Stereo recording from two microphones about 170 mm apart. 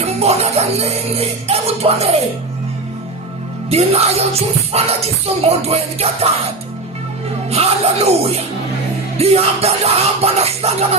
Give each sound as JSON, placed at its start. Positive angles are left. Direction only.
{"t": 0.0, "sound": "music", "side_deg": -40}
{"t": 3.7, "sound": "music", "side_deg": -40}
{"t": 7.5, "sound": "music", "side_deg": -35}